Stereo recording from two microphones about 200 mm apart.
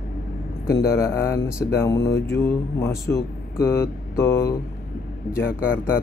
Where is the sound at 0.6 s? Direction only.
50° left (ahead or behind).